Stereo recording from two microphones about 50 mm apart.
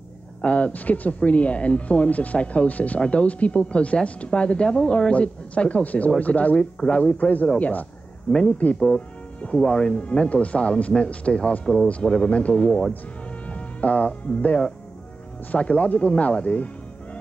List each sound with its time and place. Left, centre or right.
0.4 s speech: left
8.7 s speech: centre
11.6 s speech: centre; by 17.2 s left